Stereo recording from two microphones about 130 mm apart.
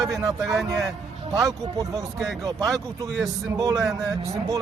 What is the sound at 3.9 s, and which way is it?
Speech, 25° right (ahead or behind).